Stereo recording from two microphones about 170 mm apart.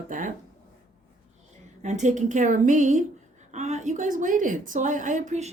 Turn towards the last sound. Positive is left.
turn(degrees=-45)  # may be behind; listen again after turning